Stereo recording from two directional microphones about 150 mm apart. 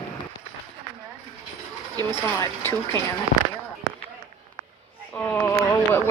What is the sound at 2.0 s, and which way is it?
Speech, 20° left (ahead or behind).